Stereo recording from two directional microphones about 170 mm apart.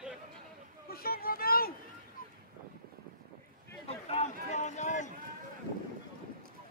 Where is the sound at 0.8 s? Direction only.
65° left (ahead or behind).